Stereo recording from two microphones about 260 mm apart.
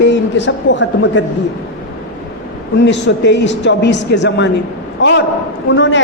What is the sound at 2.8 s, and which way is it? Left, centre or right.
A woman's voice, left.